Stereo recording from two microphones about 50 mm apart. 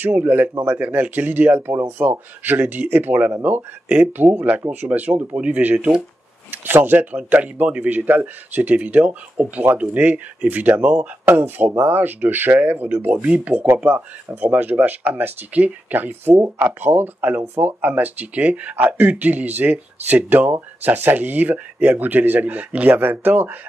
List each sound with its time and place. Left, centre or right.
0.0 s speech: right
11.2 s speech: right